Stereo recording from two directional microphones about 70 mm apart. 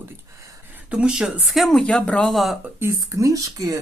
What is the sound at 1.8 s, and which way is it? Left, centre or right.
Speech, centre.